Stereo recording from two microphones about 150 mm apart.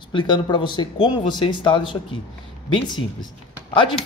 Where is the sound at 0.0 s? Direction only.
30° left (ahead or behind).